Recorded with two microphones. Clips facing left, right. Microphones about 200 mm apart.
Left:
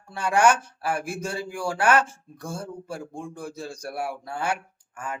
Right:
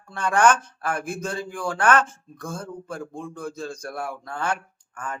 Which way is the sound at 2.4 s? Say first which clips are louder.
Right 1 dB; 30° left (ahead or behind).